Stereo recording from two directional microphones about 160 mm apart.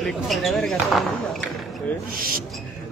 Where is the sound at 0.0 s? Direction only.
Centre (ahead or behind).